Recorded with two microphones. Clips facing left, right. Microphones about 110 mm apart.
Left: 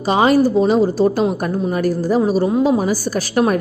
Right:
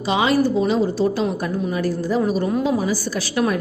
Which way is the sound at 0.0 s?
45° left (ahead or behind).